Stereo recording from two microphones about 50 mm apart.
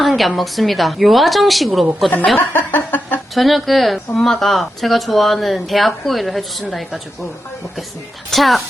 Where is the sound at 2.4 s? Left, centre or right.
Left.